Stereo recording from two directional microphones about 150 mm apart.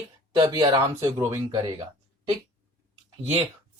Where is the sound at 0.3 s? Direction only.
30° right (ahead or behind).